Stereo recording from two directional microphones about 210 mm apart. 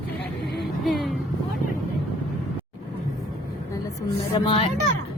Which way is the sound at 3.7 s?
15° left (ahead or behind).